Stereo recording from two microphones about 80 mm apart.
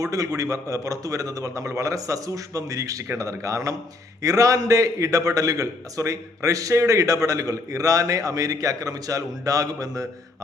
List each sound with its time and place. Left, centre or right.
0.0 s a man's voice: right